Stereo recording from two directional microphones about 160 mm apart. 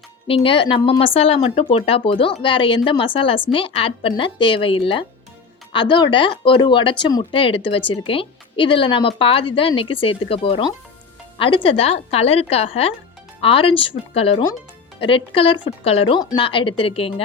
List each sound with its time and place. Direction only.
0.3 s speech: 35° left (ahead or behind)